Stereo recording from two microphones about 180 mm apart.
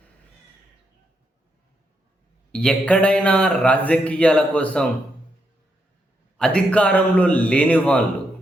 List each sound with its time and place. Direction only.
2.5 s speech: 5° left (ahead or behind)
6.3 s speech: 5° left (ahead or behind)